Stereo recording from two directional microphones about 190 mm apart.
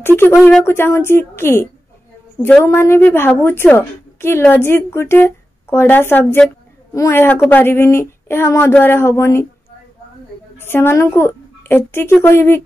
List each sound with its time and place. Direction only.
0.0 s a woman's voice: 10° left (ahead or behind)
10.6 s a woman's voice: 10° left (ahead or behind)